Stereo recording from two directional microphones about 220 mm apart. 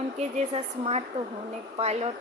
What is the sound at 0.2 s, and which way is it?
Speech, 30° right (ahead or behind).